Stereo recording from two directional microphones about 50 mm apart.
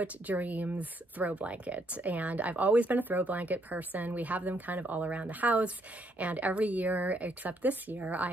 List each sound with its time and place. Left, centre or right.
0.0 s speech: right